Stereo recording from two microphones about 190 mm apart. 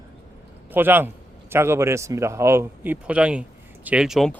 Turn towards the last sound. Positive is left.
turn(degrees=0)  # may be behind; listen again after turning